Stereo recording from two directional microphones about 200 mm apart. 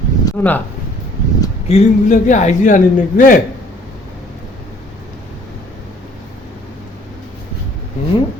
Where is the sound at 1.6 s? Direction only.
35° left (ahead or behind).